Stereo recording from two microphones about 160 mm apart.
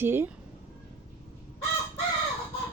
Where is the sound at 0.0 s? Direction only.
15° right (ahead or behind).